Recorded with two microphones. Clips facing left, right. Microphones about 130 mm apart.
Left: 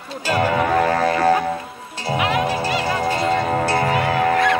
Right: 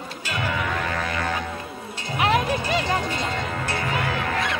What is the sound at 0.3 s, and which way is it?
Music, 40° left (ahead or behind).